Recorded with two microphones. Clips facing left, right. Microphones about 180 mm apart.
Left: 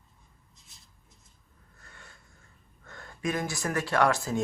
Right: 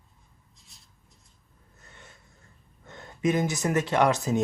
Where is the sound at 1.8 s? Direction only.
20° right (ahead or behind).